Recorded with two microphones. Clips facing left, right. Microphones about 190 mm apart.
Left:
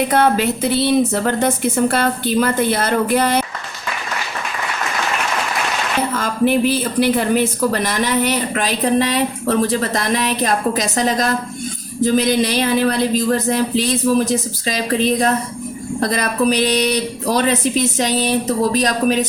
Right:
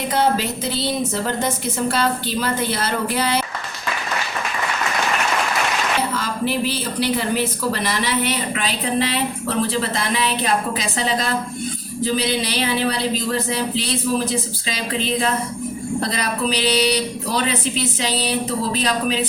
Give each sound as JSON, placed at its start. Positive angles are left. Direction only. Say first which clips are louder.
{"t": 0.1, "sound": "a woman's voice", "louder": "left 4 dB", "side_deg": 60}
{"t": 6.0, "sound": "a woman's voice", "louder": "left 5 dB", "side_deg": 50}